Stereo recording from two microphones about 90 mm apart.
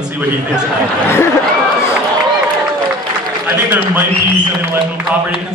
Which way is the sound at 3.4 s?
15° right (ahead or behind).